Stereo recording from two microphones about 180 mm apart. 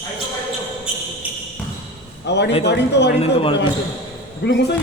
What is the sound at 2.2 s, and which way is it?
Speech, 70° left (ahead or behind).